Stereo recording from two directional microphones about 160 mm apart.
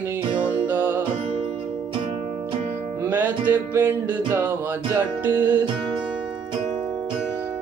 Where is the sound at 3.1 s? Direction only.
10° right (ahead or behind).